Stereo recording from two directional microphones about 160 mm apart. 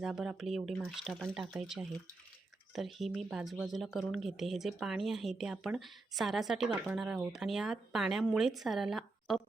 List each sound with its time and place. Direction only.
0.0 s speech: 5° right (ahead or behind)